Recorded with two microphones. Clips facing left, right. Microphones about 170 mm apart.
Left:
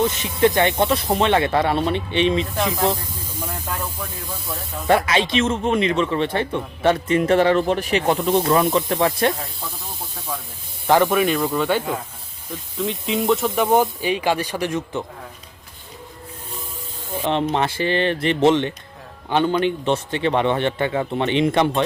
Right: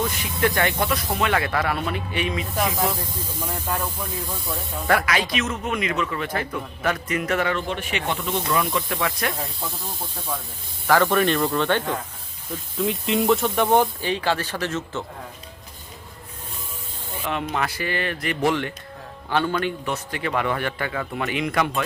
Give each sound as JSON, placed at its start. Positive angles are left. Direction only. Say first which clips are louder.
{"t": 0.0, "sound": "a man's voice", "louder": "left 6 dB", "side_deg": 25}
{"t": 4.9, "sound": "a man's voice", "louder": "left 4 dB", "side_deg": 25}
{"t": 9.3, "sound": "snake", "louder": "even", "side_deg": 0}
{"t": 10.8, "sound": "speech", "louder": "left 3 dB", "side_deg": 20}
{"t": 11.1, "sound": "speech", "louder": "left 1 dB", "side_deg": 5}
{"t": 14.0, "sound": "speech", "louder": "left 3 dB", "side_deg": 15}
{"t": 17.2, "sound": "a man's voice", "louder": "left 6 dB", "side_deg": 30}